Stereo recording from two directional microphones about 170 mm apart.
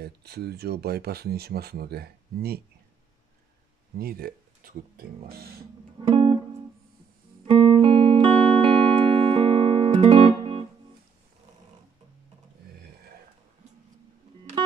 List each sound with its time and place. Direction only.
0.0 s speech: 70° right (ahead or behind)
4.0 s speech: 60° right (ahead or behind)
5.9 s music: 35° right (ahead or behind)
7.4 s music: 30° right (ahead or behind)